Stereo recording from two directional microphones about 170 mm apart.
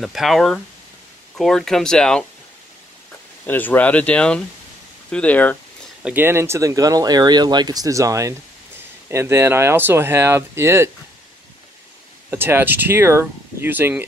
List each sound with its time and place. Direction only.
0.0 s speech: centre (ahead or behind)
3.4 s speech: 10° left (ahead or behind)
6.0 s speech: 10° right (ahead or behind)
12.3 s speech: 15° right (ahead or behind)